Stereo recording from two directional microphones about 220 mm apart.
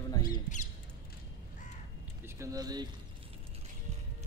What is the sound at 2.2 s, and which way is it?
Speech, 15° right (ahead or behind).